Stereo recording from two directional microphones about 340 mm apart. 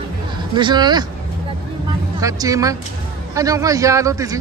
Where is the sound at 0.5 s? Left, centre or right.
Centre.